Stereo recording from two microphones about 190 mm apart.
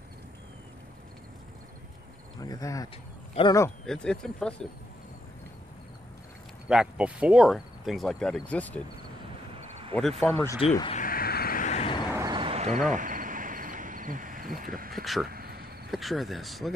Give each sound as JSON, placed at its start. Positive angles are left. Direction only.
{"t": 2.4, "sound": "speech", "side_deg": 20}
{"t": 3.8, "sound": "speech", "side_deg": 5}
{"t": 6.7, "sound": "speech", "side_deg": -5}
{"t": 9.9, "sound": "speech", "side_deg": 5}
{"t": 10.6, "sound": "speech", "side_deg": 30}
{"t": 11.1, "sound": "vehicle", "side_deg": 50}
{"t": 12.1, "sound": "a sound", "side_deg": -15}
{"t": 12.4, "sound": "a sound", "side_deg": -30}
{"t": 12.9, "sound": "a sound", "side_deg": -45}
{"t": 14.6, "sound": "speech", "side_deg": -50}
{"t": 15.0, "sound": "speech", "side_deg": 0}
{"t": 15.2, "sound": "a sound", "side_deg": -55}
{"t": 15.9, "sound": "speech", "side_deg": 0}